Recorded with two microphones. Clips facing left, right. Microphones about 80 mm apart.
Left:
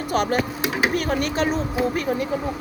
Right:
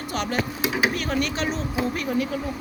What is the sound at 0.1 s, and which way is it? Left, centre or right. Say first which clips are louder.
Speech: left 5 dB; left.